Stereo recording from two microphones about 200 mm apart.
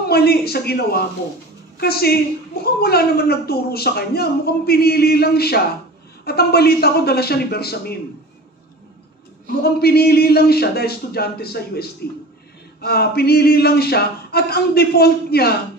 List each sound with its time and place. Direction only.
0.1 s speech: 50° left (ahead or behind)
9.6 s speech: 50° left (ahead or behind)